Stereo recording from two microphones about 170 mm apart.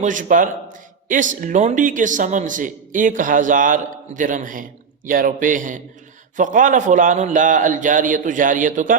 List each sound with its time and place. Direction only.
0.0 s a man's voice: 50° right (ahead or behind)